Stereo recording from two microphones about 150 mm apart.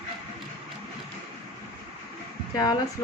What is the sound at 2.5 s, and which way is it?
Speech, 25° left (ahead or behind).